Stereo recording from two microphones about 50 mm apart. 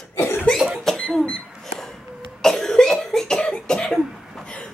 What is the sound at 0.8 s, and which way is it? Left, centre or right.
Cash register, centre.